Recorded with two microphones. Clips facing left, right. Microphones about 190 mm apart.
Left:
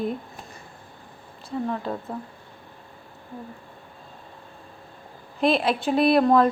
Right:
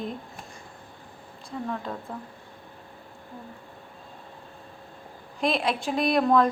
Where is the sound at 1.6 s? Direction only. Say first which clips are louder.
Left 3 dB; 25° left (ahead or behind).